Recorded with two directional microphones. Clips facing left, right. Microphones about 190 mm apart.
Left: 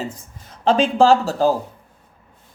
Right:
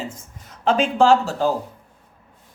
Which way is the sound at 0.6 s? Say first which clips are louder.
Left 2 dB; 35° left (ahead or behind).